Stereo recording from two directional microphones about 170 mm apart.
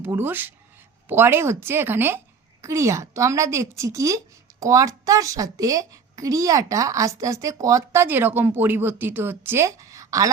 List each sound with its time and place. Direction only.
0.0 s a woman's voice: 10° right (ahead or behind)